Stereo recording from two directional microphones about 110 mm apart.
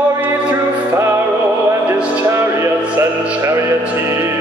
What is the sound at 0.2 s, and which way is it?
Music, 20° right (ahead or behind).